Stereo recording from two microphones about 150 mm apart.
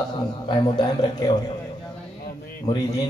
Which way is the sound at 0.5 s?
30° left (ahead or behind).